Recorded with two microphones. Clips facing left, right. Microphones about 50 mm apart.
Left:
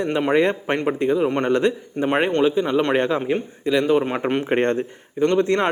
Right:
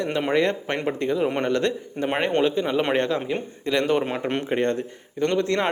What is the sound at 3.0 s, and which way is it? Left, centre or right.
Speech, left.